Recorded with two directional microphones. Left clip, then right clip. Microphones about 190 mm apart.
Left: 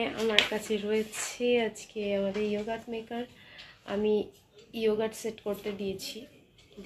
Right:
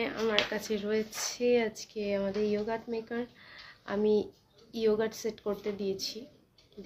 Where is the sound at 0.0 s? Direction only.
10° left (ahead or behind).